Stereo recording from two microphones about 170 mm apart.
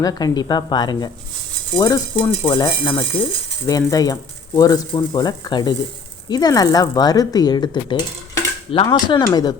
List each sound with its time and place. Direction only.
0.0 s speech: 20° left (ahead or behind)